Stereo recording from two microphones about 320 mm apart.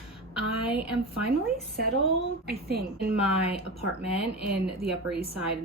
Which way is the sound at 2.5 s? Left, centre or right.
Right.